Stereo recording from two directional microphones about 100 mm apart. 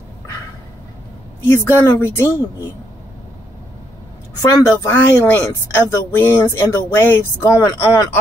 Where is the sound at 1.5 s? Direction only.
25° left (ahead or behind).